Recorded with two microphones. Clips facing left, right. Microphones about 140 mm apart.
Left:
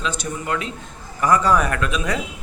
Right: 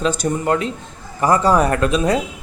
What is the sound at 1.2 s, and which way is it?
Speech, 30° right (ahead or behind).